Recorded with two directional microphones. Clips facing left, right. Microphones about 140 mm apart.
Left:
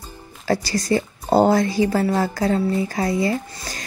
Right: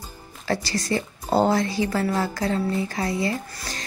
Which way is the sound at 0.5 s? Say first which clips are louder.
Left 5 dB; 40° left (ahead or behind).